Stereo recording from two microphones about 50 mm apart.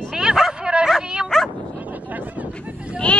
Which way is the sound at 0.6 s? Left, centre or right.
Centre.